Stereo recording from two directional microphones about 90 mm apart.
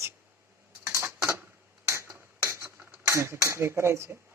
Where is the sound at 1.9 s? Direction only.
30° right (ahead or behind).